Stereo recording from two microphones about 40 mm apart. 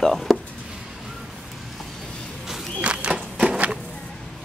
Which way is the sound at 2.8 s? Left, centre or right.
Right.